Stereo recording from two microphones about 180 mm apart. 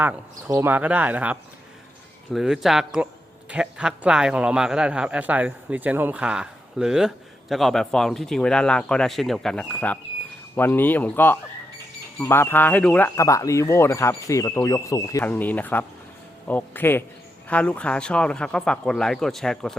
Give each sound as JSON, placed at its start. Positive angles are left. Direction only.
{"t": 0.0, "sound": "a man's voice", "side_deg": -10}
{"t": 13.1, "sound": "a man's voice", "side_deg": 15}